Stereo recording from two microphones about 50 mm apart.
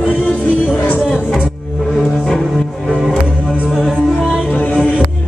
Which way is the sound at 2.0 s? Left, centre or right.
Centre.